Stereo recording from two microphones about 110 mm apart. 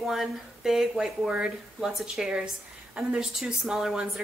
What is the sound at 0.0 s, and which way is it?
A woman's voice, centre (ahead or behind).